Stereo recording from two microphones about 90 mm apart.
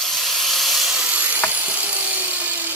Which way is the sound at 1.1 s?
15° right (ahead or behind).